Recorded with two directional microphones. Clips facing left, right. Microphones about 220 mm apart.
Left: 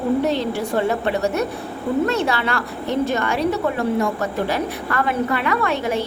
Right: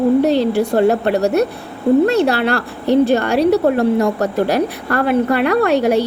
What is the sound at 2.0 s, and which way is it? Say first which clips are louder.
A woman's voice: right 6 dB; 35° right (ahead or behind).